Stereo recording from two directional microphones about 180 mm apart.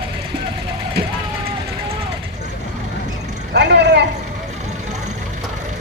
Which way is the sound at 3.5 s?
70° right (ahead or behind).